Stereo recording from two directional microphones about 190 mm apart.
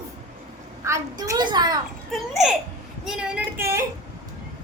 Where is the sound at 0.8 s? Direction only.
15° right (ahead or behind).